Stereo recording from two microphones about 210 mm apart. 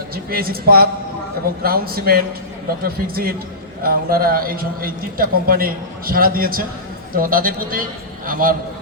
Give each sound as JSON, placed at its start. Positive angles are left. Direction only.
{"t": 0.3, "sound": "a man's voice", "side_deg": -45}